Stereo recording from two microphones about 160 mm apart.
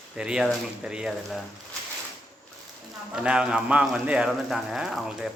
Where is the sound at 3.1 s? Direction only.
5° right (ahead or behind).